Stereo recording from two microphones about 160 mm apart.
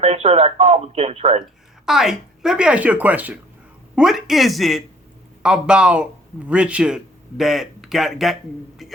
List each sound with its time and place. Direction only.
0.0 s speech: 40° right (ahead or behind)
1.9 s a man's voice: centre (ahead or behind)